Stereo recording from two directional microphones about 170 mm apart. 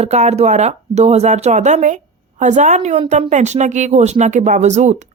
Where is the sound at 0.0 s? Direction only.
40° right (ahead or behind).